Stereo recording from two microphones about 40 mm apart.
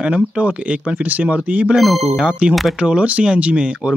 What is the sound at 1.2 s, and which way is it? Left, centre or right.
Speech, right.